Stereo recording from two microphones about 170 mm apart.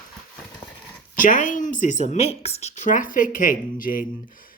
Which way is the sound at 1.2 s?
50° left (ahead or behind).